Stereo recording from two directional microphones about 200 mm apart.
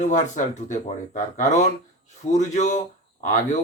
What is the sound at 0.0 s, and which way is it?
Speech, 35° left (ahead or behind).